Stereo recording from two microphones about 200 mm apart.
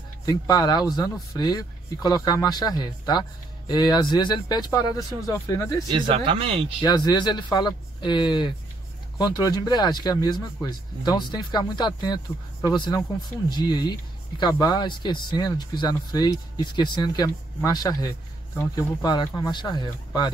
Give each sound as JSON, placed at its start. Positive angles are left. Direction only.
{"t": 0.2, "sound": "speech", "side_deg": 20}
{"t": 5.9, "sound": "speech", "side_deg": -25}
{"t": 6.8, "sound": "speech", "side_deg": 20}